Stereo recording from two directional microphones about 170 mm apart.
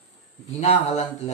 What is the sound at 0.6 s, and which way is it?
Speech, 40° left (ahead or behind).